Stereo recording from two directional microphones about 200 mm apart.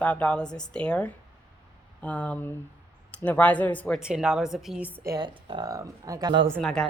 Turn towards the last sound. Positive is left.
turn(degrees=0)  # may be behind; listen again after turning